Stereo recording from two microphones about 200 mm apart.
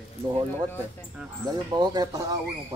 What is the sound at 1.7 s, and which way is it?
Speech, 20° right (ahead or behind).